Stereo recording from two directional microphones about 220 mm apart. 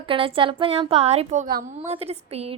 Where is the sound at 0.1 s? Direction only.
25° right (ahead or behind).